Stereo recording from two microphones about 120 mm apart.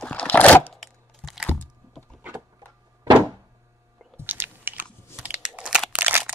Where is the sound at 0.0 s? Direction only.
10° left (ahead or behind).